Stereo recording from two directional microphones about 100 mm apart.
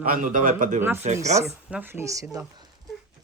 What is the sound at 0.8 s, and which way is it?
A woman's voice, 20° right (ahead or behind).